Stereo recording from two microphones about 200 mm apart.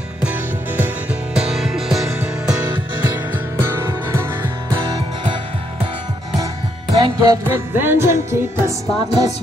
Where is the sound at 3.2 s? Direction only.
10° right (ahead or behind).